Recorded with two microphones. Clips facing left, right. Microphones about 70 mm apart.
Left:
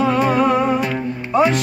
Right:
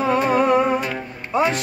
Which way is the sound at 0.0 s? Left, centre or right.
Right.